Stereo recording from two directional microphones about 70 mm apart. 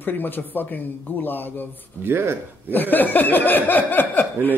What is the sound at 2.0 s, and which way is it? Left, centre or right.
Speech, right.